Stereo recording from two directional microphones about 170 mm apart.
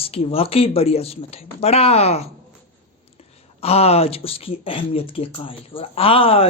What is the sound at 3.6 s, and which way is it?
Speech, 35° left (ahead or behind).